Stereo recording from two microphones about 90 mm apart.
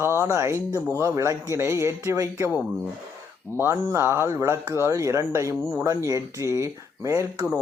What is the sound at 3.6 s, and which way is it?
Speech, 30° right (ahead or behind).